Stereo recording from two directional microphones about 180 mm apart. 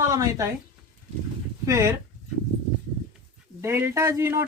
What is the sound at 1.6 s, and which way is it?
Speech, 15° right (ahead or behind).